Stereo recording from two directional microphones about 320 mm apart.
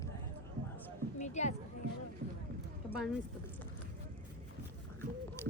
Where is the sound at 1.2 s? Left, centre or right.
Left.